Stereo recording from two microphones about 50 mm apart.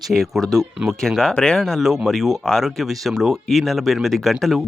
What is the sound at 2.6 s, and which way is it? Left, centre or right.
Speech, centre.